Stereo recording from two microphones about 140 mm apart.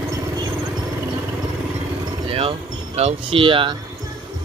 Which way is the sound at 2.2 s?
40° right (ahead or behind).